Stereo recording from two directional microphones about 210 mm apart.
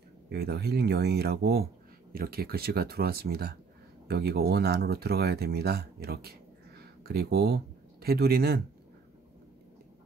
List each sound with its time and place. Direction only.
0.3 s speech: 50° right (ahead or behind)